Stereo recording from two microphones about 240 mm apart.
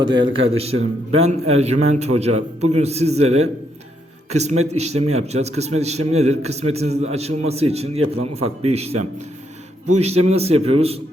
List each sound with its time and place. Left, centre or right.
0.0 s a man's voice: centre